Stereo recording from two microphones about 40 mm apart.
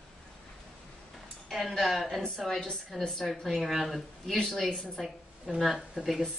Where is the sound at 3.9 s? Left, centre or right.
Centre.